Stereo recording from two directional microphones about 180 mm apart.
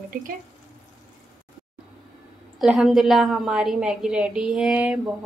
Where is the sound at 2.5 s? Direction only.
5° right (ahead or behind).